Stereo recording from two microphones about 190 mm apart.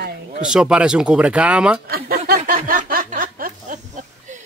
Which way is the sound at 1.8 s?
55° right (ahead or behind).